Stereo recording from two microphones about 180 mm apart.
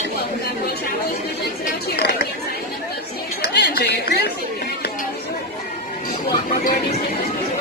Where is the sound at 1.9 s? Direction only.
60° left (ahead or behind).